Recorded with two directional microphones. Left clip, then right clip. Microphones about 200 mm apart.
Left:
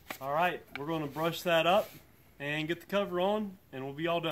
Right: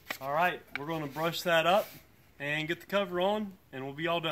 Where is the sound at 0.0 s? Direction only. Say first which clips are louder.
Right 1 dB; 5° right (ahead or behind).